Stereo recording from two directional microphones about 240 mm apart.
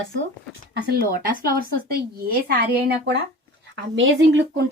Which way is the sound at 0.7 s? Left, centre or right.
Right.